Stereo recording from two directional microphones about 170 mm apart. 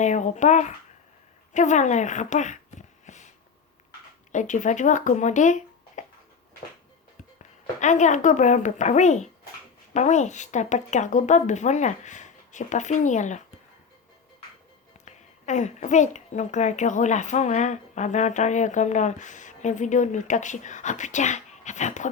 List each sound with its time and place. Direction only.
0.0 s a woman's voice: 45° left (ahead or behind)
3.1 s a sound: 45° left (ahead or behind)
4.3 s a woman's voice: 45° left (ahead or behind)
6.0 s a sound: 45° left (ahead or behind)
7.8 s a woman's voice: 45° left (ahead or behind)
15.0 s a woman's voice: 45° left (ahead or behind)